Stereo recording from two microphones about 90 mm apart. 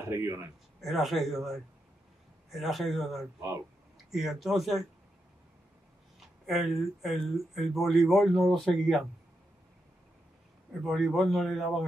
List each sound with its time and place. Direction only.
0.0 s speech: 30° right (ahead or behind)
0.7 s speech: centre (ahead or behind)
6.1 s speech: centre (ahead or behind)
10.9 s speech: centre (ahead or behind)